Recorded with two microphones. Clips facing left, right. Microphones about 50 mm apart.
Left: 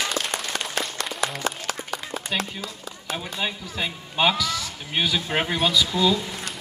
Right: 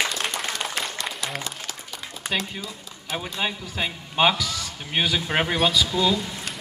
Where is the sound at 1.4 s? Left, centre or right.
Left.